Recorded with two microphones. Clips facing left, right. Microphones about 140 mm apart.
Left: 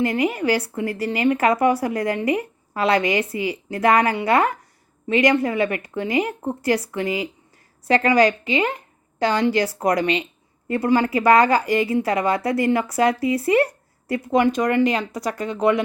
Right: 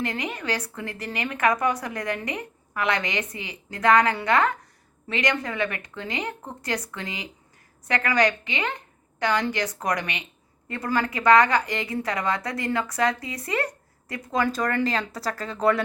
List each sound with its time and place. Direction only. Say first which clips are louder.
0.0 s a woman's voice: left 9 dB; 25° left (ahead or behind)